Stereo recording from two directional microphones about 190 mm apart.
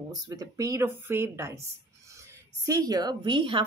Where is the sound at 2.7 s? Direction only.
20° right (ahead or behind).